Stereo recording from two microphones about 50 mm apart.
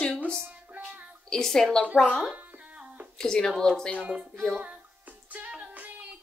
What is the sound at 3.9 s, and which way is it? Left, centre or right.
Speech, right.